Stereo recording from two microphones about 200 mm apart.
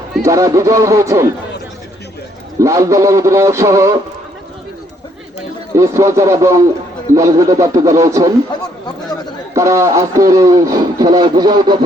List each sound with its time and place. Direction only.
0.2 s speech: 15° right (ahead or behind)
2.6 s speech: 15° right (ahead or behind)
5.7 s speech: 15° right (ahead or behind)
9.6 s speech: 15° right (ahead or behind)